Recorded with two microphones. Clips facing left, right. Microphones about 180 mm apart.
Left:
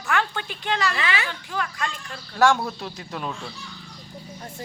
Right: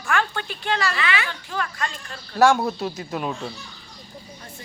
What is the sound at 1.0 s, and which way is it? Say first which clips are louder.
Speech: right 1 dB; 40° left (ahead or behind).